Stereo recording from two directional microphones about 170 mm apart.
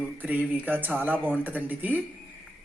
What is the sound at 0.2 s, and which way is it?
Speech, 10° right (ahead or behind).